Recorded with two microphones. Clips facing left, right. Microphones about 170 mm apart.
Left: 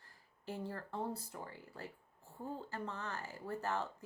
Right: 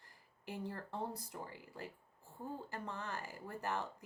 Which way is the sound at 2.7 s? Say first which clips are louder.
Left 1 dB; 15° right (ahead or behind).